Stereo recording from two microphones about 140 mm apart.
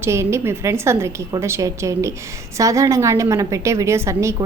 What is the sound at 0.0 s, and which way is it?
Speech, 20° right (ahead or behind).